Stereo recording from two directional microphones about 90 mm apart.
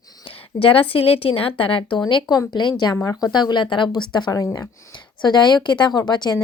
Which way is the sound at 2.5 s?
55° left (ahead or behind).